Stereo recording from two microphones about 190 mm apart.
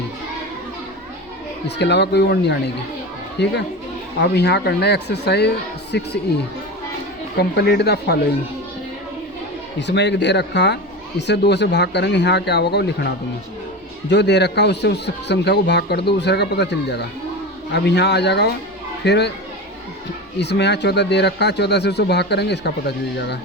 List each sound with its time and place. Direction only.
1.6 s speech: 65° left (ahead or behind)
7.3 s speech: 60° left (ahead or behind)
9.8 s speech: 65° left (ahead or behind)
20.4 s speech: 65° left (ahead or behind)